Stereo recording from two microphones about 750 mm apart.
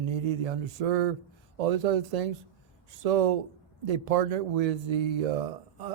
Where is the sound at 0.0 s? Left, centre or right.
Right.